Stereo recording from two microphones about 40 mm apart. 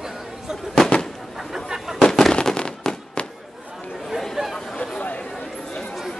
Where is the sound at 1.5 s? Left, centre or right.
Centre.